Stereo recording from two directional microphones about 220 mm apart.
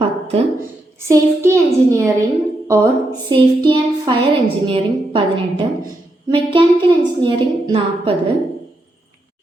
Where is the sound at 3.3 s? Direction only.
20° right (ahead or behind).